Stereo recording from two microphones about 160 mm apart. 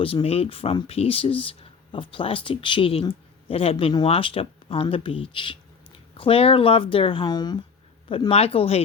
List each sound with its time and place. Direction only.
0.0 s speech: 35° left (ahead or behind)
8.1 s speech: 35° left (ahead or behind)